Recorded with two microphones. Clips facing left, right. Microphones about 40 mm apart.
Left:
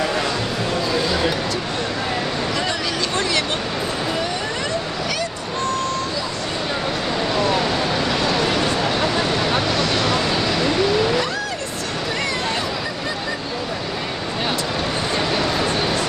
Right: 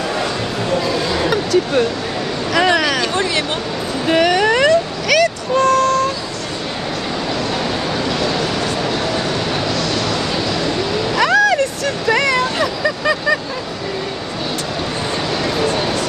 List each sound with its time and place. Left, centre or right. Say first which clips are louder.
4.1 s vehicle: right 10 dB; right
8.1 s a sound: right 1 dB; centre
10.3 s cat: even; centre
11.1 s vehicle: right 10 dB; right
12.1 s dog: right 11 dB; right